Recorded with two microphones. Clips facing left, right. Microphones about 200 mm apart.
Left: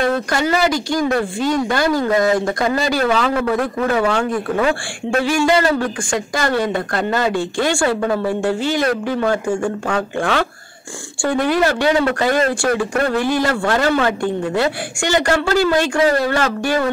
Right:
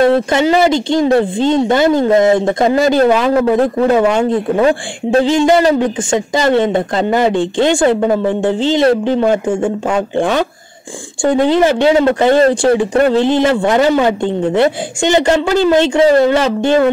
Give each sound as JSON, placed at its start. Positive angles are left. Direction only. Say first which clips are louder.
{"t": 0.3, "sound": "a man's voice", "louder": "right 6 dB", "side_deg": -20}